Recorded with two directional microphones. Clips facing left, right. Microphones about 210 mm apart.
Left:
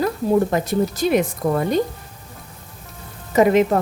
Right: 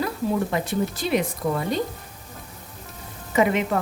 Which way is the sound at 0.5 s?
40° left (ahead or behind).